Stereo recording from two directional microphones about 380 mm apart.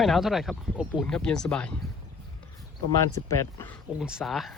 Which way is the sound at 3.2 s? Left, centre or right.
Centre.